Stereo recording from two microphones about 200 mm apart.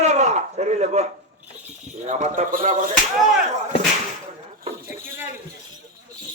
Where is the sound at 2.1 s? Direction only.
40° right (ahead or behind).